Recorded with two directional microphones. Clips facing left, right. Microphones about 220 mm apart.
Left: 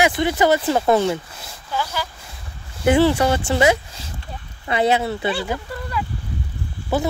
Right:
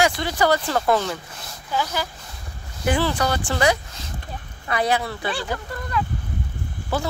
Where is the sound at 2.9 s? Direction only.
25° left (ahead or behind).